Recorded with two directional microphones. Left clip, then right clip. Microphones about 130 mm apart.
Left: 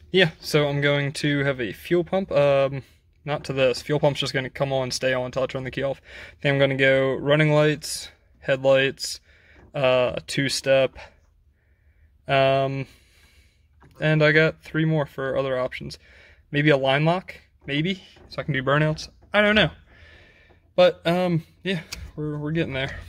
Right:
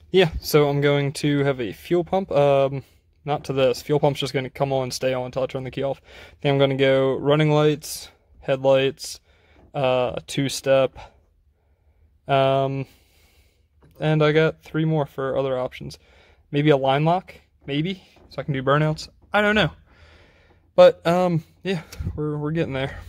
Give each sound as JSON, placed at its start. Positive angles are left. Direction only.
{"t": 0.1, "sound": "speech", "side_deg": -35}
{"t": 12.3, "sound": "speech", "side_deg": -20}